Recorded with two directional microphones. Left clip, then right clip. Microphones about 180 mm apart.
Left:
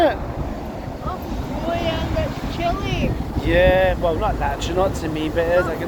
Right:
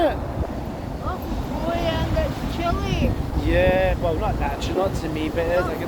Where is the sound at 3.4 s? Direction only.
35° left (ahead or behind).